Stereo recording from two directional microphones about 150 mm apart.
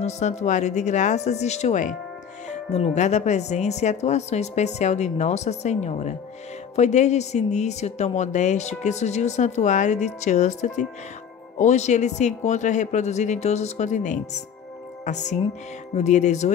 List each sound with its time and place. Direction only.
0.0 s a woman's voice: 50° left (ahead or behind)